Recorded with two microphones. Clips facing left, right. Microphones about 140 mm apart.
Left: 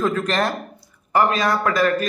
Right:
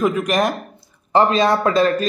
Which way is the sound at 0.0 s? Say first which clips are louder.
Right 3 dB; 15° right (ahead or behind).